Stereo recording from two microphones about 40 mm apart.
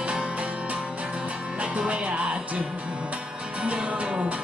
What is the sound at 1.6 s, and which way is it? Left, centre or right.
Music, right.